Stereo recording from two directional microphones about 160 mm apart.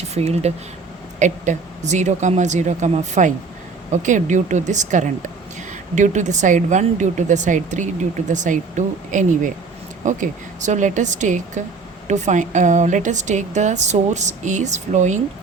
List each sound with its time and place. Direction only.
0.1 s a woman's voice: 40° right (ahead or behind)